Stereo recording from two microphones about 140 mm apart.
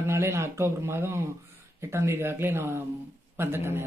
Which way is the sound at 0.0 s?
20° right (ahead or behind).